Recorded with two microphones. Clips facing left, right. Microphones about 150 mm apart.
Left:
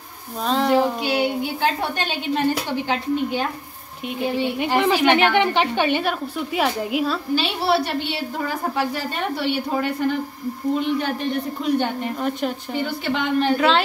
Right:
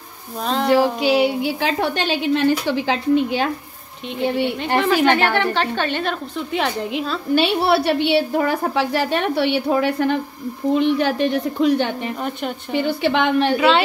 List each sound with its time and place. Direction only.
0.5 s a woman's voice: centre (ahead or behind)
1.0 s a woman's voice: 90° right
4.7 s a woman's voice: 15° left (ahead or behind)
7.3 s a woman's voice: 60° right (ahead or behind)
10.8 s a woman's voice: 85° right
12.2 s a woman's voice: centre (ahead or behind)
12.7 s a woman's voice: 75° right (ahead or behind)
13.6 s a woman's voice: 5° right (ahead or behind)